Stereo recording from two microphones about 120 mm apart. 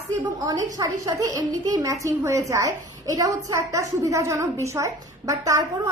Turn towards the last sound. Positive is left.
turn(degrees=-25)  # may be behind; listen again after turning